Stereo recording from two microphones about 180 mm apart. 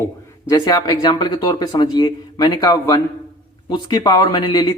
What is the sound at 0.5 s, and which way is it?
Speech, 20° left (ahead or behind).